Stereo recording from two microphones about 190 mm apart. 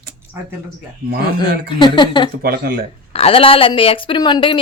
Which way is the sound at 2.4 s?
50° right (ahead or behind).